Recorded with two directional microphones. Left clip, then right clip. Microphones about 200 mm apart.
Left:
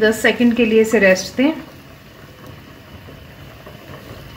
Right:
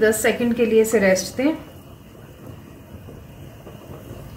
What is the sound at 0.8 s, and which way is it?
Speech, 45° left (ahead or behind).